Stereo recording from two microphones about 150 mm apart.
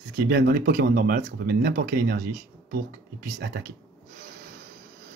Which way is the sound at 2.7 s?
90° right.